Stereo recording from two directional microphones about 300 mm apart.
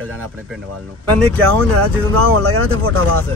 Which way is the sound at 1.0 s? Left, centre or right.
Right.